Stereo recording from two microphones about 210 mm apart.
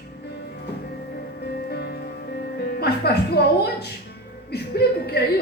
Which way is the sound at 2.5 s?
50° left (ahead or behind).